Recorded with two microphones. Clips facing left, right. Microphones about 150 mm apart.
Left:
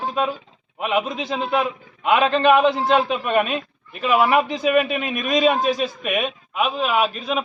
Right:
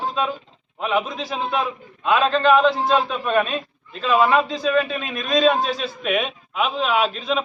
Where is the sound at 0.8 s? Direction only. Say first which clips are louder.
Left 1 dB; 20° left (ahead or behind).